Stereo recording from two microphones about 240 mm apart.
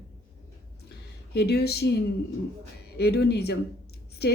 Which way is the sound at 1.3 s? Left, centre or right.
Left.